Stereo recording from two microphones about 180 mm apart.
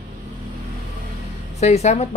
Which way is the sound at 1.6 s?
40° left (ahead or behind).